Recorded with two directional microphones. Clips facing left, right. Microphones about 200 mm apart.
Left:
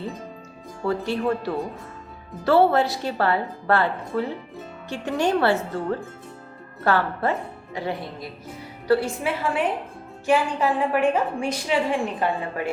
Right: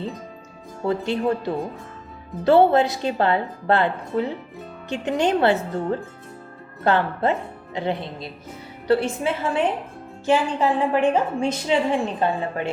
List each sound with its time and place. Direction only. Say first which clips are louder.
0.8 s a woman's voice: right 2 dB; 20° right (ahead or behind)